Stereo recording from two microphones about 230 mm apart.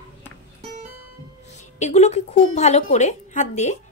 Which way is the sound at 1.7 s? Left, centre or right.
Left.